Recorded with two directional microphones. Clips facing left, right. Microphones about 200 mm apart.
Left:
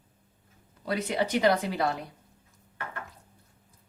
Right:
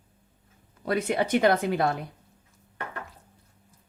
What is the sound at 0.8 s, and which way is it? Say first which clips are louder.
Speech: right 3 dB; 50° right (ahead or behind).